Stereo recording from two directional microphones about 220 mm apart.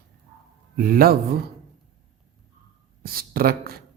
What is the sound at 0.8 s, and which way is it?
Speech, 45° right (ahead or behind).